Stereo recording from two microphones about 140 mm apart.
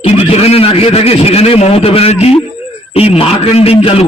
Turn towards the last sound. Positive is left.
turn(degrees=45)  # may be behind; listen again after turning